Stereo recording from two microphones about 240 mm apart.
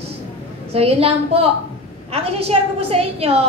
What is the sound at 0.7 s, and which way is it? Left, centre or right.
A woman's voice, right.